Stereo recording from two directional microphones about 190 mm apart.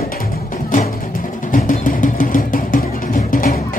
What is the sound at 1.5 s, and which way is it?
Music, 45° left (ahead or behind).